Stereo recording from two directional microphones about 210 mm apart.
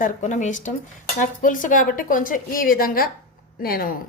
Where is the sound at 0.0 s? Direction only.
35° left (ahead or behind).